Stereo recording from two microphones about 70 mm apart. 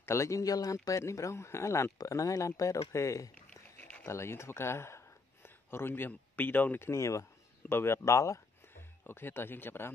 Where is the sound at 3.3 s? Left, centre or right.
Left.